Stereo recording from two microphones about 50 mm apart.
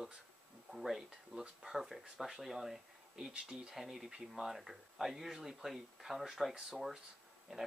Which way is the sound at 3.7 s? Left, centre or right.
Centre.